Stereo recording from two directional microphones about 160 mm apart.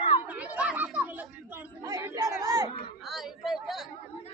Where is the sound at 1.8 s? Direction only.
20° right (ahead or behind).